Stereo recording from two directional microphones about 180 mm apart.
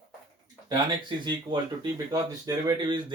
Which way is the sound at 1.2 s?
25° right (ahead or behind).